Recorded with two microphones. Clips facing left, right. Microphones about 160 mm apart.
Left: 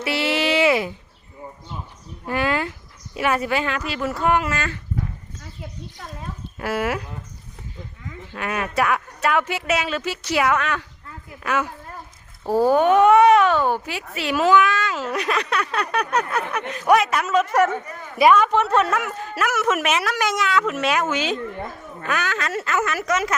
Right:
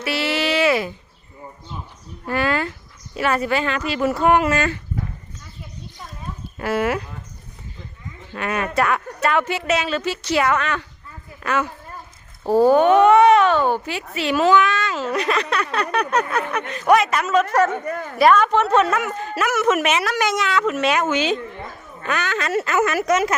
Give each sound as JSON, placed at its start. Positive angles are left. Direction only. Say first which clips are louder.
{"t": 0.0, "sound": "a sound", "louder": "even", "side_deg": 20}
{"t": 2.2, "sound": "a sound", "louder": "right 1 dB", "side_deg": 15}
{"t": 3.2, "sound": "speech", "louder": "right 1 dB", "side_deg": 10}
{"t": 4.0, "sound": "speech", "louder": "right 4 dB", "side_deg": -15}
{"t": 6.6, "sound": "a woman's voice", "louder": "right 3 dB", "side_deg": 5}
{"t": 8.3, "sound": "a woman's voice", "louder": "right 3 dB", "side_deg": 5}
{"t": 17.8, "sound": "a woman's voice", "louder": "right 10 dB", "side_deg": -60}
{"t": 18.2, "sound": "a woman's voice", "louder": "even", "side_deg": 10}